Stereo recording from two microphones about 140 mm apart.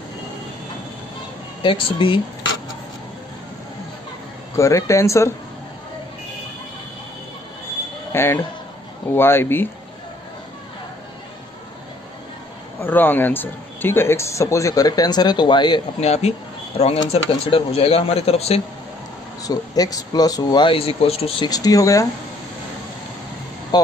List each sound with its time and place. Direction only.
1.6 s speech: 35° left (ahead or behind)
4.6 s speech: 20° left (ahead or behind)
8.1 s speech: 15° left (ahead or behind)
12.8 s speech: 15° left (ahead or behind); by 15.8 s 35° left (ahead or behind)
16.0 s a man's voice: 50° left (ahead or behind)
19.4 s speech: 25° left (ahead or behind); by 21.5 s 40° left (ahead or behind)
21.5 s speech: 25° left (ahead or behind)
23.7 s a sound: 30° left (ahead or behind)